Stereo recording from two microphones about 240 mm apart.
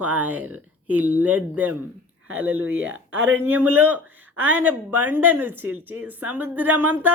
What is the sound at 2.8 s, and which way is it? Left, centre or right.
Speech, right.